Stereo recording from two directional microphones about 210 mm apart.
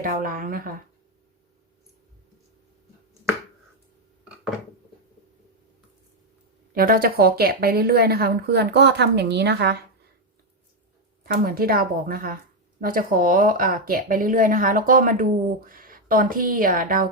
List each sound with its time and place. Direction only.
0.0 s speech: 40° right (ahead or behind)
6.7 s speech: 45° right (ahead or behind)
11.2 s speech: 45° right (ahead or behind)